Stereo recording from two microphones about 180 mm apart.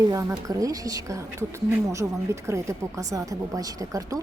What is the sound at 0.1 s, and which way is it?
A woman's voice, 20° right (ahead or behind).